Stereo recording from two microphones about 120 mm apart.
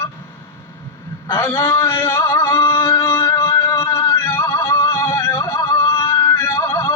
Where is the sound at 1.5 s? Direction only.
25° left (ahead or behind).